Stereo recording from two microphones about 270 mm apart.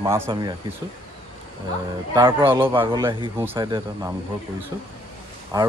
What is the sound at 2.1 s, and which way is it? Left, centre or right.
Speech, centre.